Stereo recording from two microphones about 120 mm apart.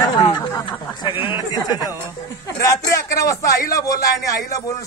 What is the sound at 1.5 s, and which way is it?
A man's voice, 30° left (ahead or behind).